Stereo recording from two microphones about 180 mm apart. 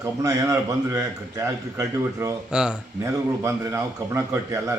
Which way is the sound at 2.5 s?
5° right (ahead or behind).